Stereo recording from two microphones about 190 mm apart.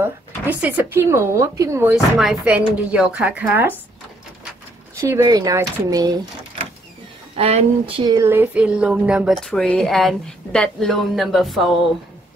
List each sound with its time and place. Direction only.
0.0 s speech: 10° right (ahead or behind)
5.0 s speech: 15° right (ahead or behind)
7.3 s speech: 30° right (ahead or behind); by 11.6 s centre (ahead or behind)